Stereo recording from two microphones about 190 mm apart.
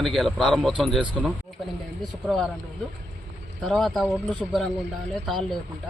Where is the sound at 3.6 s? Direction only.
Centre (ahead or behind).